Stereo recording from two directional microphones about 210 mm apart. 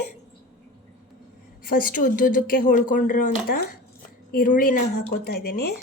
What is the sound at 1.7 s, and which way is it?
Speech, 40° left (ahead or behind).